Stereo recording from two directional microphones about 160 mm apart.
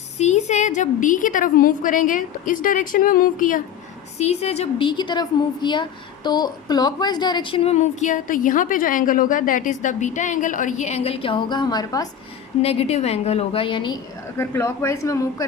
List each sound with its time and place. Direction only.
0.2 s a woman's voice: 45° left (ahead or behind)
4.2 s a woman's voice: 40° left (ahead or behind); by 12.0 s 25° left (ahead or behind)
12.6 s a woman's voice: 40° left (ahead or behind)
14.3 s speech: 15° left (ahead or behind)